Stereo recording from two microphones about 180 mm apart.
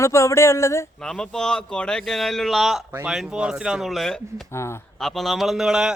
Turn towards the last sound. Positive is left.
turn(degrees=-5)  # may be behind; listen again after turning